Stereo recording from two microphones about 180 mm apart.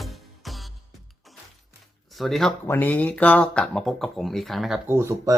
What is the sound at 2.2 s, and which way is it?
Speech, centre (ahead or behind).